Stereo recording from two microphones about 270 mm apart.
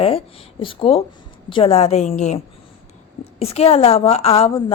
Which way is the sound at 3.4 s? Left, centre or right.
Left.